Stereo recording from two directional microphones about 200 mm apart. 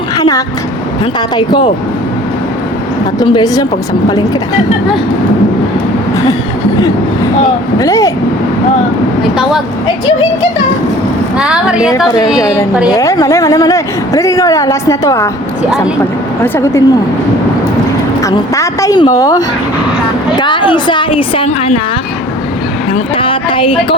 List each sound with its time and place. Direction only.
0.2 s vehicle: 20° left (ahead or behind)
3.2 s a woman's voice: 20° left (ahead or behind)
7.8 s a woman's voice: 15° left (ahead or behind)
11.3 s speech: 5° right (ahead or behind)
12.4 s a woman's voice: 15° left (ahead or behind)
16.4 s a woman's voice: 15° left (ahead or behind)
18.2 s a woman's voice: 15° left (ahead or behind)
23.1 s a sound: 25° left (ahead or behind)